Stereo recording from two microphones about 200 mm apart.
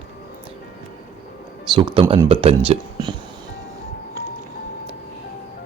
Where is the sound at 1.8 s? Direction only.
25° right (ahead or behind).